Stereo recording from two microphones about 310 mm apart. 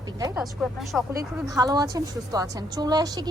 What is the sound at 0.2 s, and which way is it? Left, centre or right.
A woman's voice, centre.